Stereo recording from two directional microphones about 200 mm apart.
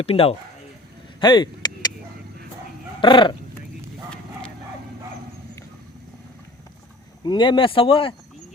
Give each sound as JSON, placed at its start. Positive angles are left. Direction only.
{"t": 0.0, "sound": "speech", "side_deg": 30}
{"t": 3.0, "sound": "speech", "side_deg": 25}
{"t": 4.1, "sound": "a sound", "side_deg": 5}
{"t": 7.3, "sound": "speech", "side_deg": 25}